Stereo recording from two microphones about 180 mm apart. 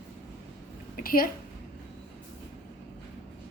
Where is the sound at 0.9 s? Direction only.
55° left (ahead or behind).